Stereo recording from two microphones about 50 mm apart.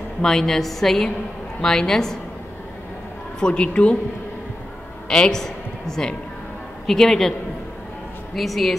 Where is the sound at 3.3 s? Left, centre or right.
Centre.